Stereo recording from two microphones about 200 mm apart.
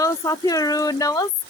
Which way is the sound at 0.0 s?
15° left (ahead or behind).